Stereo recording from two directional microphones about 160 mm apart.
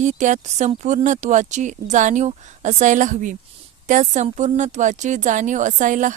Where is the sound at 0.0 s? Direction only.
50° right (ahead or behind).